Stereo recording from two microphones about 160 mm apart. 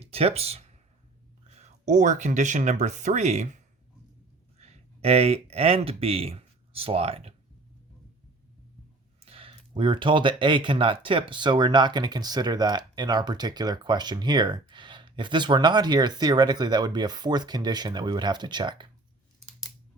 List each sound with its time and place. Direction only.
0.0 s a sound: 40° right (ahead or behind)
1.5 s speech: 50° right (ahead or behind)
9.2 s speech: 35° right (ahead or behind)